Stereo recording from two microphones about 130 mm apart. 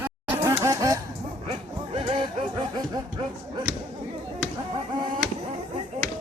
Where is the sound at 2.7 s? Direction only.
30° right (ahead or behind).